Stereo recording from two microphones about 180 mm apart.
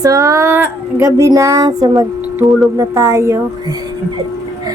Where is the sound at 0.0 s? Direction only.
20° right (ahead or behind).